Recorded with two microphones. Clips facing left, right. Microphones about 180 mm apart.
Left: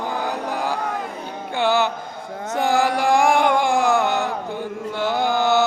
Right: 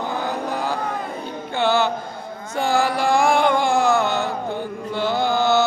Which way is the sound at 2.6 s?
15° left (ahead or behind).